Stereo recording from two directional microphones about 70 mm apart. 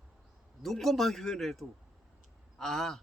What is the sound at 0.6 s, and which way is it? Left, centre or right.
Speech, centre.